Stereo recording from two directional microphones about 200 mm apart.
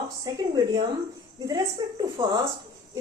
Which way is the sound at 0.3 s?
20° right (ahead or behind).